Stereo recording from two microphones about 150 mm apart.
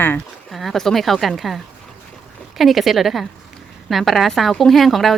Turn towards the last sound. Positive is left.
turn(degrees=0)  # may be behind; listen again after turning